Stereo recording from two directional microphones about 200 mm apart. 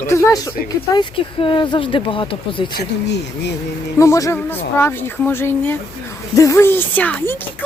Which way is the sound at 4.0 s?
15° left (ahead or behind).